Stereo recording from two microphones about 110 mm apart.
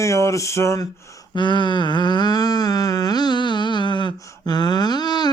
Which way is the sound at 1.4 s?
45° left (ahead or behind).